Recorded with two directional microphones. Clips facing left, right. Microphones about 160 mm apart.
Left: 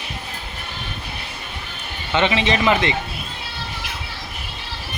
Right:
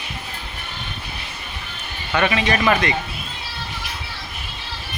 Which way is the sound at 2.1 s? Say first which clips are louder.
Left 1 dB; 20° left (ahead or behind).